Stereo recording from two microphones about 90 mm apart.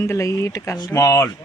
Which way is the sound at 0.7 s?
45° left (ahead or behind).